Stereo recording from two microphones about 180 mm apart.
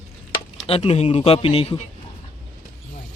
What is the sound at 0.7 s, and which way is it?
A man's voice, 35° left (ahead or behind).